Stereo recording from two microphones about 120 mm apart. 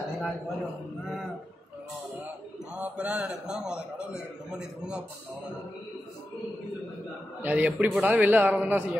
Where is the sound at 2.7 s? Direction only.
10° right (ahead or behind).